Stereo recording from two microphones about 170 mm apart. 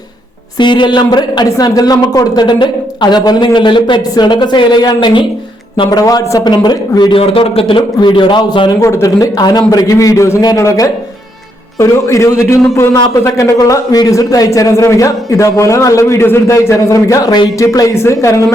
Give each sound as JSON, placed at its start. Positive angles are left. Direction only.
{"t": 0.6, "sound": "a man's voice", "side_deg": 25}